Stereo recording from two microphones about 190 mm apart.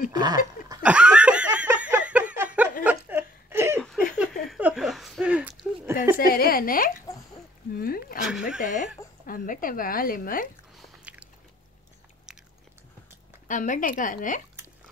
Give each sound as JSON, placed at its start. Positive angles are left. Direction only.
{"t": 0.1, "sound": "speech", "side_deg": -20}
{"t": 0.8, "sound": "laughter", "side_deg": -5}
{"t": 2.8, "sound": "a sound", "side_deg": -10}
{"t": 3.8, "sound": "a sound", "side_deg": 0}
{"t": 6.1, "sound": "a woman's voice", "side_deg": 50}
{"t": 7.7, "sound": "a sound", "side_deg": 50}
{"t": 8.2, "sound": "speech", "side_deg": -5}
{"t": 8.6, "sound": "speech", "side_deg": 45}
{"t": 10.8, "sound": "biting", "side_deg": -5}
{"t": 12.3, "sound": "biting", "side_deg": -5}
{"t": 13.5, "sound": "a woman's voice", "side_deg": 45}